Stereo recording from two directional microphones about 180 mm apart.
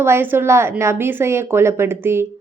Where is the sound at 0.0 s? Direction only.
10° right (ahead or behind).